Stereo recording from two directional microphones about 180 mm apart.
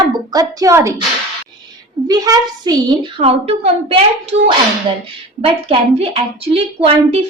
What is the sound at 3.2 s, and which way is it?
A woman's voice, 35° right (ahead or behind).